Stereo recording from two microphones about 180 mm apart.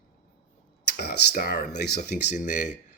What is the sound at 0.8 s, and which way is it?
Speech, 60° left (ahead or behind).